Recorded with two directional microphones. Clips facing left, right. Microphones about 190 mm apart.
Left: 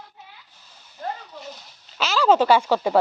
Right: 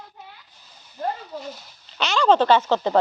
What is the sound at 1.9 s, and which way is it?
Speech, centre (ahead or behind).